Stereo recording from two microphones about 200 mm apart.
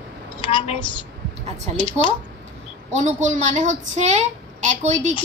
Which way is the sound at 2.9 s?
35° right (ahead or behind).